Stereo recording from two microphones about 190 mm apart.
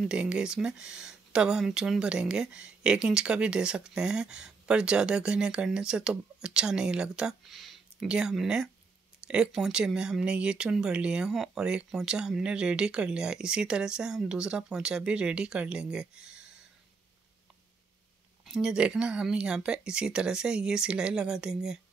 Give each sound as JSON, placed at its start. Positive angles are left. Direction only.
{"t": 0.0, "sound": "speech", "side_deg": -5}
{"t": 18.4, "sound": "speech", "side_deg": -5}